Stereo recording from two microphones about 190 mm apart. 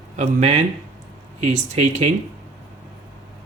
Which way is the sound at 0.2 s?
35° right (ahead or behind).